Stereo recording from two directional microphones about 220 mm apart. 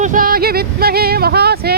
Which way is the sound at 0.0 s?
40° right (ahead or behind).